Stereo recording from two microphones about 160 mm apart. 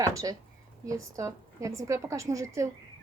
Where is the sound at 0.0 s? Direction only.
20° right (ahead or behind).